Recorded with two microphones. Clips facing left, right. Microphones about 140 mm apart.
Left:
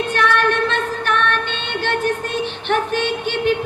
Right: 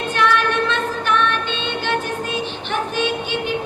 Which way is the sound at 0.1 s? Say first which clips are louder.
Right 1 dB; 60° left (ahead or behind).